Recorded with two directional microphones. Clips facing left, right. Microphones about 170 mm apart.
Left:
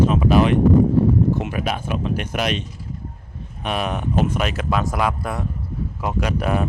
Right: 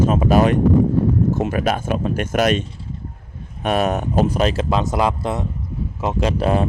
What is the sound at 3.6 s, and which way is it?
Speech, 45° right (ahead or behind).